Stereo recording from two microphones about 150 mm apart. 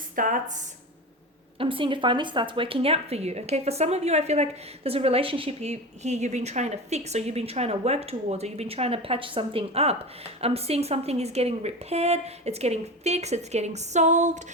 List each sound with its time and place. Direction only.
0.2 s speech: 60° right (ahead or behind)
1.5 s a woman's voice: 35° right (ahead or behind); by 14.4 s 55° right (ahead or behind)